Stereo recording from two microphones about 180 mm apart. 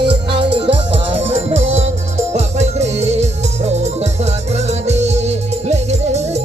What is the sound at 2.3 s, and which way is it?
Music, 35° right (ahead or behind).